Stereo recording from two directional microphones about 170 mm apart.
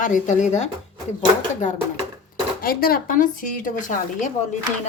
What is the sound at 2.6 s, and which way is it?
Speech, 60° left (ahead or behind).